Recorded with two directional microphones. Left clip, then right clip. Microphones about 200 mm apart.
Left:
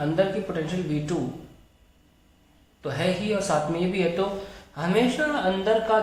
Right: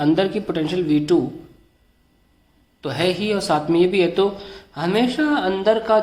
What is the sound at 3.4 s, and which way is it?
A man's voice, 55° right (ahead or behind).